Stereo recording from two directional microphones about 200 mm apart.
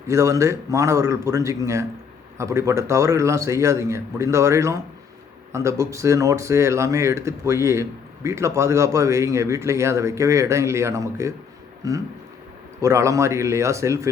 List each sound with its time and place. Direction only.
0.1 s speech: 15° right (ahead or behind)